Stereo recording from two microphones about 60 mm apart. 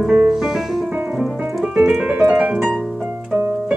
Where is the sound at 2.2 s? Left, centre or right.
Right.